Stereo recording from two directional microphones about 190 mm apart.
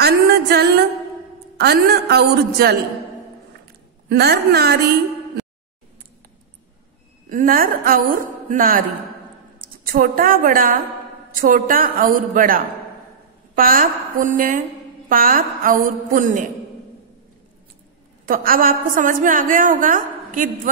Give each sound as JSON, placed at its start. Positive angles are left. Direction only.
{"t": 0.0, "sound": "music", "side_deg": -55}
{"t": 1.6, "sound": "a woman's voice", "side_deg": -55}
{"t": 4.1, "sound": "a woman's voice", "side_deg": -55}
{"t": 7.2, "sound": "a woman's voice", "side_deg": -45}
{"t": 18.2, "sound": "a woman's voice", "side_deg": -50}